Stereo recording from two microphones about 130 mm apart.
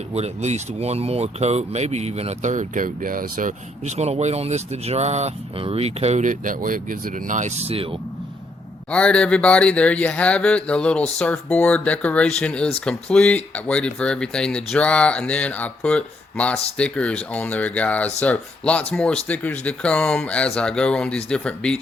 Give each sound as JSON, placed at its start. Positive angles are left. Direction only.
{"t": 0.1, "sound": "speech", "side_deg": -55}
{"t": 3.9, "sound": "speech", "side_deg": -55}
{"t": 7.7, "sound": "speech", "side_deg": -45}
{"t": 8.9, "sound": "speech", "side_deg": 10}